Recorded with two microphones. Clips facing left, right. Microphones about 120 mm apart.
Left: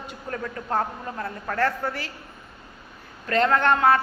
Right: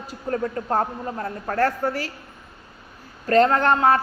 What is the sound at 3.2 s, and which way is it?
Speech, 35° right (ahead or behind).